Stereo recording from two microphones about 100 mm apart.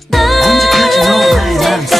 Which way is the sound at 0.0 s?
Centre (ahead or behind).